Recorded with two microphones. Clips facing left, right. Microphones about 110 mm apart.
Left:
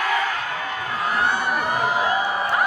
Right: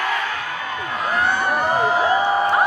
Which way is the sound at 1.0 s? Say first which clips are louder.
Right 2 dB; 30° right (ahead or behind).